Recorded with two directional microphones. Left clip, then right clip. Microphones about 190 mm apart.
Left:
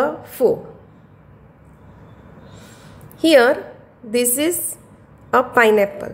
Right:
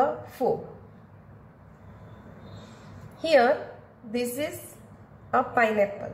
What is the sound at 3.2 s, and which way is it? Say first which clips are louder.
A woman's voice: left 8 dB; 65° left (ahead or behind).